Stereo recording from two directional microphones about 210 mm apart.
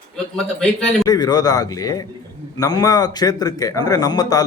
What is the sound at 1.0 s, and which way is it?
A man's voice, 20° left (ahead or behind).